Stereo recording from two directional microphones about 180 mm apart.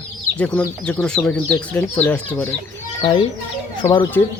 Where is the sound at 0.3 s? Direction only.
10° left (ahead or behind).